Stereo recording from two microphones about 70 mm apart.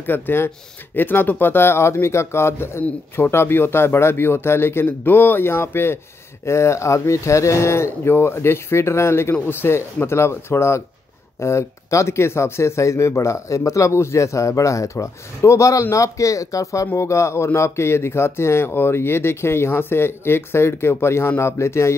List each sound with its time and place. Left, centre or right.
0.0 s speech: left